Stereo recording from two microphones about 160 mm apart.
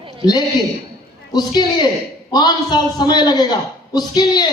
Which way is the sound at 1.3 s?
25° left (ahead or behind).